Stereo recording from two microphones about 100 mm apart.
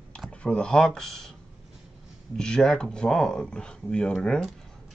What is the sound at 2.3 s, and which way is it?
Speech, 5° left (ahead or behind).